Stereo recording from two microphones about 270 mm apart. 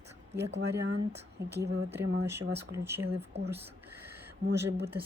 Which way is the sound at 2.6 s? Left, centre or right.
Centre.